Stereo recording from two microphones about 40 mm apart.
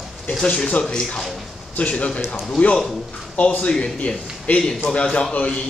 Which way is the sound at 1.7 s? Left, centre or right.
Left.